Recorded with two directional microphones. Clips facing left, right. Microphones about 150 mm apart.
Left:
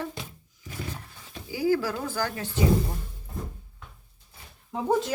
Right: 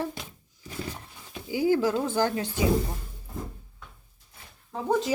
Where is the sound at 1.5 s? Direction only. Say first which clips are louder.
Right 2 dB; 20° right (ahead or behind).